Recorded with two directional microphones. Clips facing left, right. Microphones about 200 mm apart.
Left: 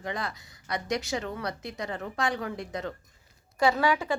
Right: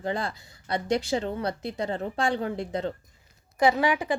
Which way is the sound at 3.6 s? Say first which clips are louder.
Right 2 dB; 15° right (ahead or behind).